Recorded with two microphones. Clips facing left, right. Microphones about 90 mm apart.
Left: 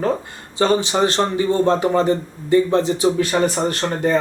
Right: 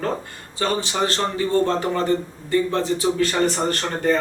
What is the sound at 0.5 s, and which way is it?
A man's voice, 20° left (ahead or behind).